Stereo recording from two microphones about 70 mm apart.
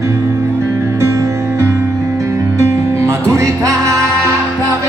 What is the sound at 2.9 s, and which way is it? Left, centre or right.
Music, right.